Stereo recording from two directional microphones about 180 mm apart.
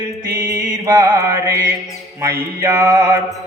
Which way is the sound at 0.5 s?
20° right (ahead or behind).